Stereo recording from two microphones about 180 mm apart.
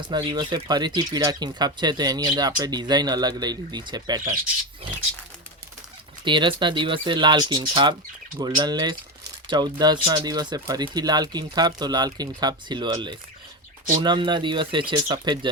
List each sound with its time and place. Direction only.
0.1 s speech: 25° right (ahead or behind)
6.2 s speech: 25° right (ahead or behind)